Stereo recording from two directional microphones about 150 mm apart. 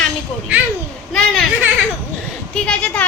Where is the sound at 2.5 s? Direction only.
5° left (ahead or behind).